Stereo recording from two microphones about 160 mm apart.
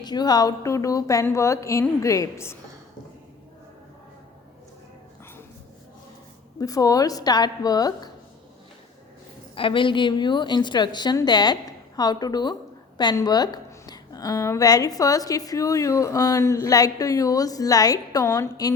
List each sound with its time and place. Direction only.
0.0 s a woman's voice: 25° left (ahead or behind)
6.6 s a woman's voice: 20° left (ahead or behind)
9.6 s a woman's voice: 30° left (ahead or behind)